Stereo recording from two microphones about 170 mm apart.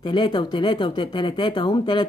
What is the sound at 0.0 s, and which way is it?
Speech, 25° left (ahead or behind).